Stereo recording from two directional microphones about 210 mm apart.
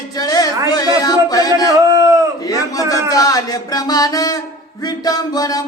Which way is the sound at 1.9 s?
15° right (ahead or behind).